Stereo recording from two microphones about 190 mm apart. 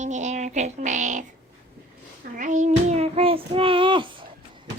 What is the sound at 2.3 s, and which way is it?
Child singing, 45° right (ahead or behind).